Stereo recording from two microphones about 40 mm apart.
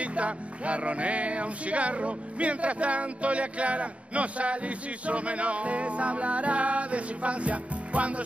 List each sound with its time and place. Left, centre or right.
0.0 s speech: right